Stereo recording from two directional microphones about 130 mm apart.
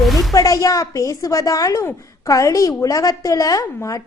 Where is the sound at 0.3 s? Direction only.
25° left (ahead or behind).